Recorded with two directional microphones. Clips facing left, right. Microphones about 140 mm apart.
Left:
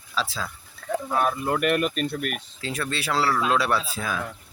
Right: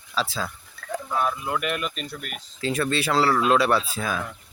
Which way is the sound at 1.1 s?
60° left (ahead or behind).